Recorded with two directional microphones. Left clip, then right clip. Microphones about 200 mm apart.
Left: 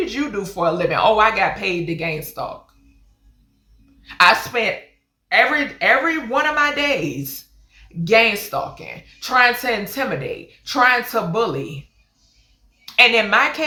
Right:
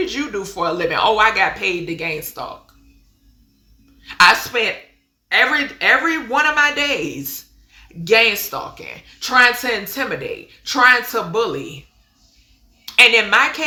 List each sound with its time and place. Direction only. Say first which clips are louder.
0.0 s speech: right 1 dB; 15° right (ahead or behind)
4.0 s a woman's voice: right 2 dB; 15° right (ahead or behind)
12.8 s a woman's voice: right 2 dB; 15° right (ahead or behind)